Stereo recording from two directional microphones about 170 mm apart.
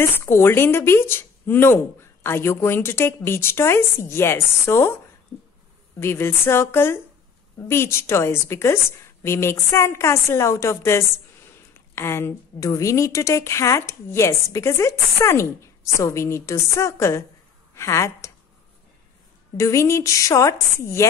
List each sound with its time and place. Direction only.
0.1 s speech: 15° left (ahead or behind)
5.9 s a woman's voice: 15° left (ahead or behind)
19.5 s speech: 15° left (ahead or behind)